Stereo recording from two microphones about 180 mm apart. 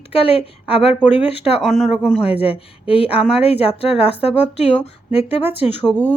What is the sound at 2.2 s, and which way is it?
Speech, 30° left (ahead or behind).